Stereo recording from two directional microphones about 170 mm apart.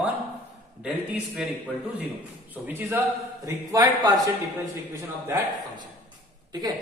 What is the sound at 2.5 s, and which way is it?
A man's voice, 10° right (ahead or behind).